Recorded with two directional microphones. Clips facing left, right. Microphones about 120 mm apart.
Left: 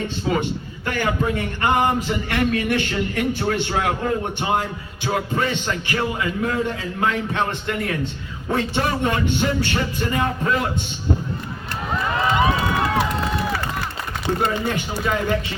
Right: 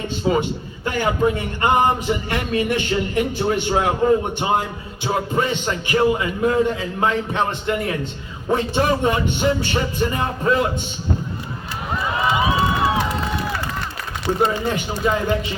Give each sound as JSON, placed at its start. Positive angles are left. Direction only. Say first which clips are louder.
{"t": 0.3, "sound": "speech", "louder": "right 4 dB", "side_deg": -20}
{"t": 12.1, "sound": "run", "louder": "even", "side_deg": -5}
{"t": 14.3, "sound": "speech", "louder": "right 3 dB", "side_deg": -5}
{"t": 15.0, "sound": "speech", "louder": "right 2 dB", "side_deg": -25}